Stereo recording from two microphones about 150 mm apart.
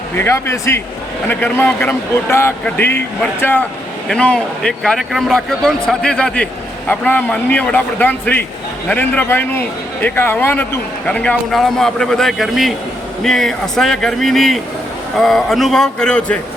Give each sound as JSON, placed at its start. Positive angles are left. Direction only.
{"t": 0.2, "sound": "a man's voice", "side_deg": 15}